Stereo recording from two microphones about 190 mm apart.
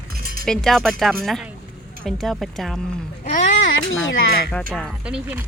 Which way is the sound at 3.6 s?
90° left.